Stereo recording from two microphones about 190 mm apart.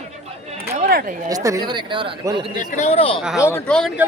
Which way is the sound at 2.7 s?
35° left (ahead or behind).